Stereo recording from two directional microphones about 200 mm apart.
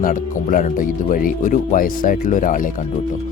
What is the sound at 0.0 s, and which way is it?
Speech, 40° left (ahead or behind).